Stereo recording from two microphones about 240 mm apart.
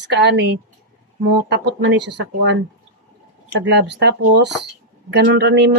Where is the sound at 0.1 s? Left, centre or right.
Right.